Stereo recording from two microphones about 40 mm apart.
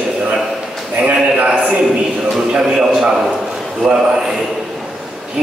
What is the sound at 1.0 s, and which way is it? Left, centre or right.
Speech, right.